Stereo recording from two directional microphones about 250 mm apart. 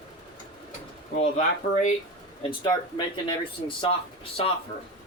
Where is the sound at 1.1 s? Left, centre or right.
Left.